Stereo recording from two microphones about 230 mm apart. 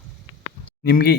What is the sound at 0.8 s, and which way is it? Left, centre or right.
Speech, left.